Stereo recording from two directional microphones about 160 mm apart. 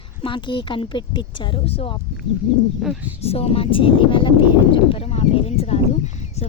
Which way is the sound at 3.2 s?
40° left (ahead or behind).